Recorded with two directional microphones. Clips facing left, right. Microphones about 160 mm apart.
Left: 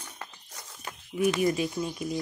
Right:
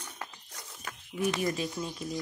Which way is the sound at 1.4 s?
15° left (ahead or behind).